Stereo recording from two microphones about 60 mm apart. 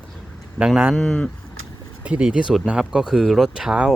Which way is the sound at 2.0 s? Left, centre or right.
Centre.